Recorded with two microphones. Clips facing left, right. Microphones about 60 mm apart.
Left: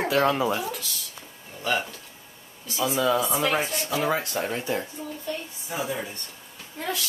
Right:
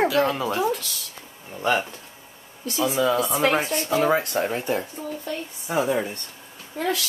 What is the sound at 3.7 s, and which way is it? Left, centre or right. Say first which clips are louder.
Speech: right 5 dB; right.